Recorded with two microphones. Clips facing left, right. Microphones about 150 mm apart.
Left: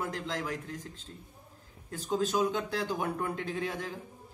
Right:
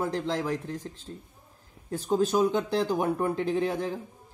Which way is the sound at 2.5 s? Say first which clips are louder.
Right 6 dB; 20° right (ahead or behind).